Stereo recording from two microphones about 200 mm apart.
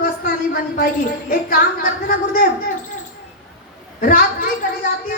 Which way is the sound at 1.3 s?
45° left (ahead or behind).